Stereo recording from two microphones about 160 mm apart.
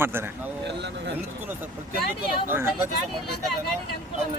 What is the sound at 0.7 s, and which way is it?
Speech, 90° right.